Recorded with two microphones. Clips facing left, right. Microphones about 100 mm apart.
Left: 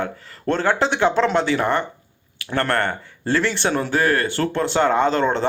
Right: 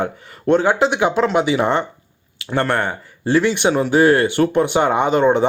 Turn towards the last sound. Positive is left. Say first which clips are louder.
# right 4 dB
turn(degrees=-15)  # may be behind; listen again after turning